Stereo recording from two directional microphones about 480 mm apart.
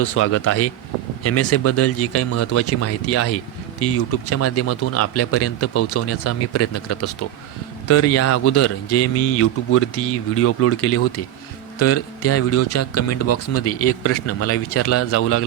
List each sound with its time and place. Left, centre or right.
0.0 s speech: left